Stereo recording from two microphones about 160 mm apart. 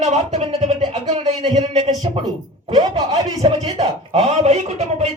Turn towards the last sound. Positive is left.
turn(degrees=-40)  # may be behind; listen again after turning